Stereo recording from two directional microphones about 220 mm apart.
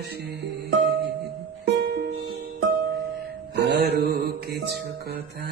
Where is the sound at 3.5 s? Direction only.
50° right (ahead or behind).